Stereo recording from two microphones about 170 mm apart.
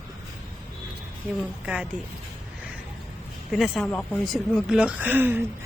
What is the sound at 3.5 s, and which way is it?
Speech, centre (ahead or behind).